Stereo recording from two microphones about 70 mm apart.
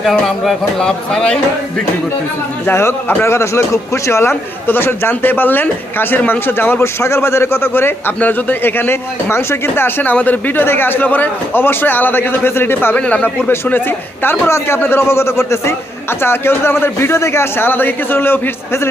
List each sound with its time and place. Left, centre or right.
0.0 s speech: centre
2.6 s a man's voice: left
13.0 s speech: centre
13.2 s a man's voice: left